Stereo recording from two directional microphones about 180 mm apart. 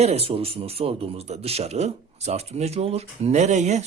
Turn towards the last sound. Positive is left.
turn(degrees=-40)  # may be behind; listen again after turning